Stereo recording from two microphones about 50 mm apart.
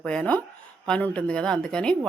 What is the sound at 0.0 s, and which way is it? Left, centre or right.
A woman's voice, centre.